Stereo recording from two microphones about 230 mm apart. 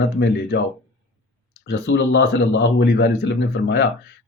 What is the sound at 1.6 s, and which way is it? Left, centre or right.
Speech, left.